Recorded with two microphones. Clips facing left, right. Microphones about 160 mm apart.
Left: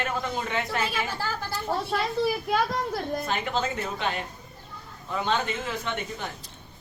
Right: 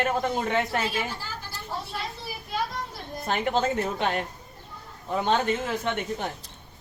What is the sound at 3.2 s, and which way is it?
Speech, 55° right (ahead or behind).